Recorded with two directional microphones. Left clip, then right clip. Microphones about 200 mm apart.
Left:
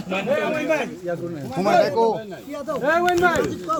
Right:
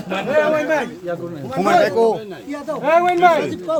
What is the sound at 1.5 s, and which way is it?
Speech, 30° right (ahead or behind).